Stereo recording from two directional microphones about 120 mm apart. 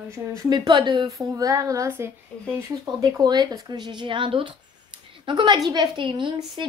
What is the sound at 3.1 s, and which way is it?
A woman's voice, 35° right (ahead or behind).